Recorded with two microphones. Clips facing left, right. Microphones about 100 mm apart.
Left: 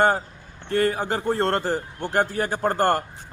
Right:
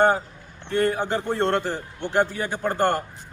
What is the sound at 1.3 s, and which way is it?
Speech, 40° left (ahead or behind).